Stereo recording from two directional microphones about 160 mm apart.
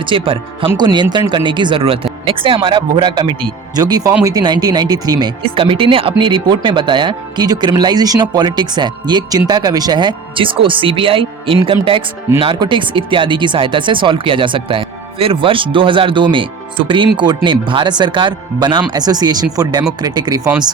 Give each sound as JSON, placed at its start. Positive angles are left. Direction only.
{"t": 0.0, "sound": "speech", "side_deg": -35}